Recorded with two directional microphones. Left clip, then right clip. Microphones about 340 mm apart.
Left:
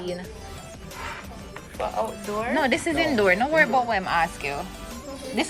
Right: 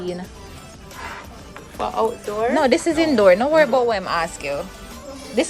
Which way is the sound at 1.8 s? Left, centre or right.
Right.